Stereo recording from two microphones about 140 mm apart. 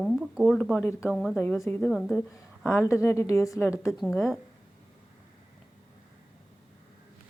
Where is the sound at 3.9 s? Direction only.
Centre (ahead or behind).